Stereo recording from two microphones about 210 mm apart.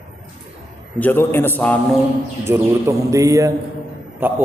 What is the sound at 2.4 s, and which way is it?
A man's voice, 15° right (ahead or behind).